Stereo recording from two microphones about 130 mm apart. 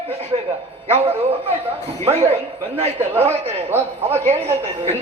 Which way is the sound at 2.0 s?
50° right (ahead or behind).